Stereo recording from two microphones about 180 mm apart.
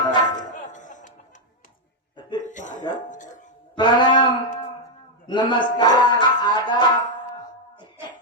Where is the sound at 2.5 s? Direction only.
45° left (ahead or behind).